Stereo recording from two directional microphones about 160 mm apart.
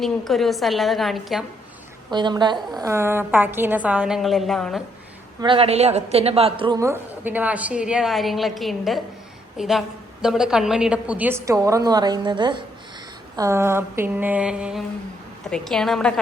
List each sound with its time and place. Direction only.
0.0 s a woman's voice: centre (ahead or behind)
2.0 s a woman's voice: 30° right (ahead or behind); by 4.8 s centre (ahead or behind)
5.4 s a woman's voice: 35° right (ahead or behind)
6.7 s a woman's voice: 15° right (ahead or behind)
13.3 s a woman's voice: 20° right (ahead or behind); by 16.2 s 5° left (ahead or behind)